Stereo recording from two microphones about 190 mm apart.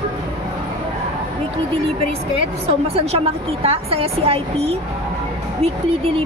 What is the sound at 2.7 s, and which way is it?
A woman's voice, 30° right (ahead or behind).